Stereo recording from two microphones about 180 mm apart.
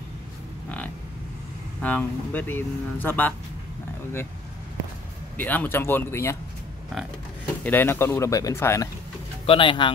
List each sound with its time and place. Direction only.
1.8 s speech: 10° left (ahead or behind)
5.4 s speech: 10° left (ahead or behind)
7.6 s speech: 10° left (ahead or behind)
9.5 s speech: 30° left (ahead or behind)